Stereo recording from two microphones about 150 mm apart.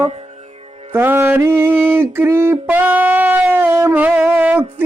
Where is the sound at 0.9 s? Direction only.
15° right (ahead or behind).